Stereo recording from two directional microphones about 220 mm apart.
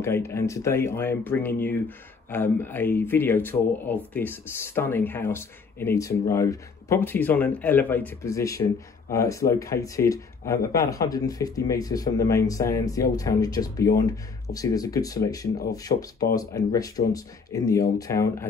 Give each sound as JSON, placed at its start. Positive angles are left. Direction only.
{"t": 0.0, "sound": "speech", "side_deg": 10}